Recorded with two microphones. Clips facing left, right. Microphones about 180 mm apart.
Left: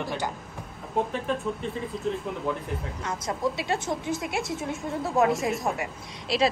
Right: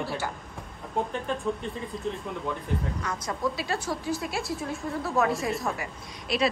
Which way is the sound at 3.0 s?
25° left (ahead or behind).